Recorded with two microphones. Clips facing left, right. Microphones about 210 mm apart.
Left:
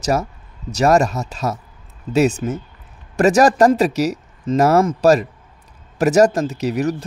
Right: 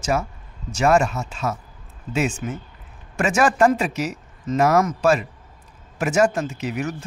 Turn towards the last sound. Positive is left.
turn(degrees=40)  # may be behind; listen again after turning